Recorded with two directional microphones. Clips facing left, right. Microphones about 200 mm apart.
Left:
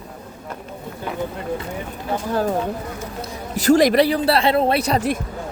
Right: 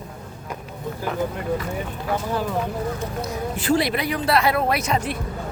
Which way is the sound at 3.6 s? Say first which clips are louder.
Left 8 dB; 45° left (ahead or behind).